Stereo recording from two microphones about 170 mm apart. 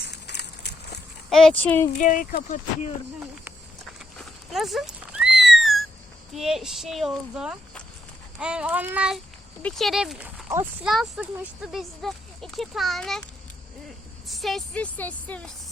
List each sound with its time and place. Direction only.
0.0 s a sound: 80° left
1.3 s speech: 5° left (ahead or behind)
2.0 s speech: 50° left (ahead or behind)
4.2 s a sound: centre (ahead or behind)
6.3 s speech: centre (ahead or behind)
14.3 s speech: centre (ahead or behind)